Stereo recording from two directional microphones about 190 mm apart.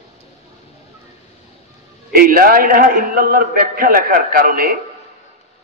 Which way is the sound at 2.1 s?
50° right (ahead or behind).